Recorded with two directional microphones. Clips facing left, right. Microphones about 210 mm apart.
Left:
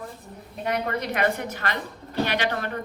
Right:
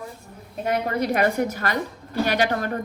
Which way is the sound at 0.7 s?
45° right (ahead or behind).